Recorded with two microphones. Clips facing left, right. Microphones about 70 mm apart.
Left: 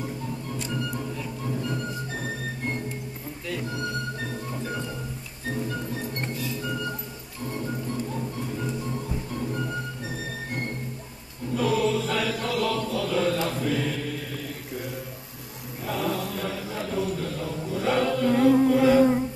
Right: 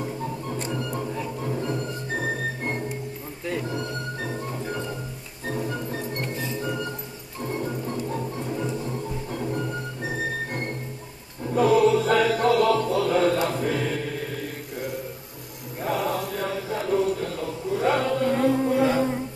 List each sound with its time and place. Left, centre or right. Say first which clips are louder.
0.6 s music: right 1 dB; right
3.4 s music: right 4 dB; right
6.3 s music: right 2 dB; right
11.5 s chant: right 6 dB; right
15.8 s chant: right 3 dB; right
18.7 s humming: left 3 dB; right